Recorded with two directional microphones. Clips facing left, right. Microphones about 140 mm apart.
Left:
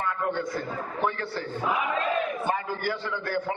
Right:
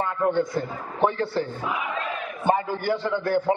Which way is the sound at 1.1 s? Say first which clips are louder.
Right 7 dB; 25° right (ahead or behind).